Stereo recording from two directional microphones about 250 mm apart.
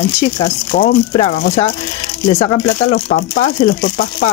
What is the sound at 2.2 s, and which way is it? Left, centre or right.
Speech, left.